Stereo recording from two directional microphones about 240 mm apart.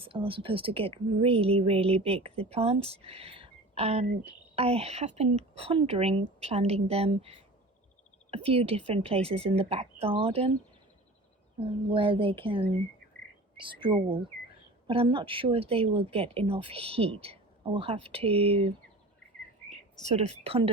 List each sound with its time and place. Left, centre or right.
0.0 s speech: right
11.6 s speech: right
19.7 s speech: right